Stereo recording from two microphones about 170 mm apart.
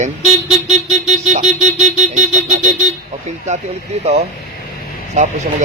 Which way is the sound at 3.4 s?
40° right (ahead or behind).